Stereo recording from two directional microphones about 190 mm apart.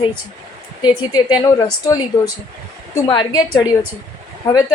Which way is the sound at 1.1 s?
20° left (ahead or behind).